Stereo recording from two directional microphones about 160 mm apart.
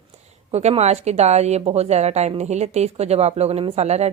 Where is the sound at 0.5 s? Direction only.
40° right (ahead or behind).